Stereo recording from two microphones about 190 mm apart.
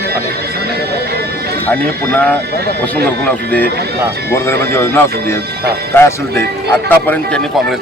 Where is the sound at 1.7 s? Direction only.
10° left (ahead or behind).